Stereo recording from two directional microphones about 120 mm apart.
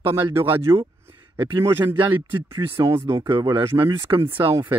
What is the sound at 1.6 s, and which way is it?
Speech, 20° right (ahead or behind).